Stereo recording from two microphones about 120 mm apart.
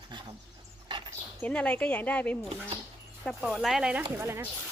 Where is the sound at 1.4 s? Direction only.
10° left (ahead or behind).